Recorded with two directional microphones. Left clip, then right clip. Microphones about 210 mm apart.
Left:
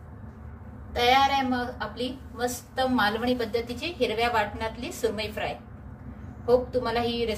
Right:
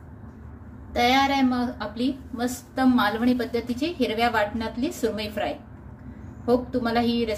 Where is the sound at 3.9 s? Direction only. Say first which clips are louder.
Right 1 dB; 30° right (ahead or behind).